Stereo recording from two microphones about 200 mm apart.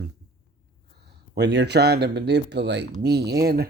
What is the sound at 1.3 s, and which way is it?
Speech, 60° right (ahead or behind).